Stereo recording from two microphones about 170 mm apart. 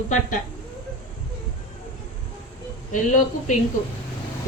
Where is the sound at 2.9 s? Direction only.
45° left (ahead or behind).